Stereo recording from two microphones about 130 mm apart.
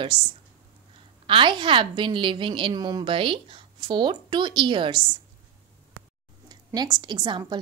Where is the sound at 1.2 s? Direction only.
40° right (ahead or behind).